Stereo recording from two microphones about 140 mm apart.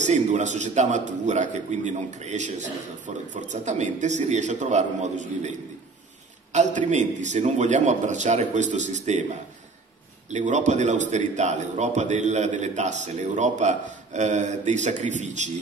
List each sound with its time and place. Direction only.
0.0 s a man's voice: 55° right (ahead or behind)
6.5 s a man's voice: 60° right (ahead or behind)
10.3 s a man's voice: 60° right (ahead or behind)